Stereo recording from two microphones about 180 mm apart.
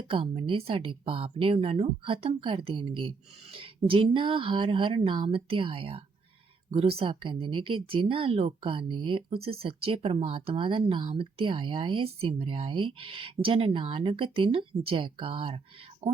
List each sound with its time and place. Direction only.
0.1 s speech: 30° right (ahead or behind)